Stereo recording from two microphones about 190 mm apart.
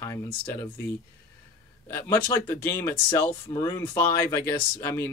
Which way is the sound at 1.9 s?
15° left (ahead or behind).